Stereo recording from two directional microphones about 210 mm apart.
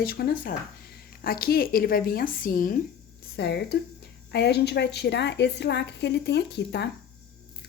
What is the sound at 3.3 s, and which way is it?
Speech, 55° left (ahead or behind).